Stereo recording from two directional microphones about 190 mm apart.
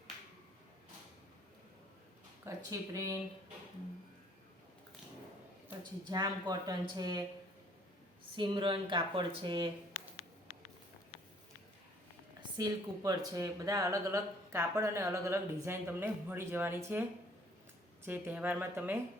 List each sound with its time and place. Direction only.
2.4 s speech: 15° right (ahead or behind)
5.6 s speech: 20° right (ahead or behind)
8.4 s speech: 25° right (ahead or behind)
12.4 s speech: 20° right (ahead or behind)